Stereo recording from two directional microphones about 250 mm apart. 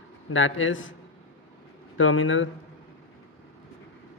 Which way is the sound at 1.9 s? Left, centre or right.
Left.